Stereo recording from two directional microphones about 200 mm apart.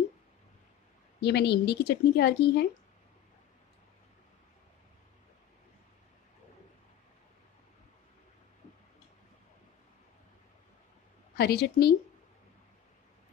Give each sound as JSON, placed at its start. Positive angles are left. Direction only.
{"t": 1.2, "sound": "speech", "side_deg": 55}
{"t": 11.3, "sound": "a woman's voice", "side_deg": 55}